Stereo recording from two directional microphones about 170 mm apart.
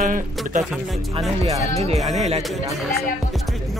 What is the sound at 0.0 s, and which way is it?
Speech, 50° right (ahead or behind).